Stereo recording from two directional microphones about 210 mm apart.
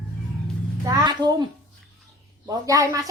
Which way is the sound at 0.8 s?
15° right (ahead or behind).